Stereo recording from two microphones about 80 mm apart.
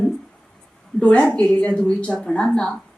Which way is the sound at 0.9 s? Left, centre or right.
Centre.